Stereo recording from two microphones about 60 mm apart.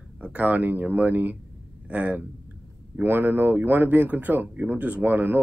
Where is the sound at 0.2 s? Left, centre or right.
Right.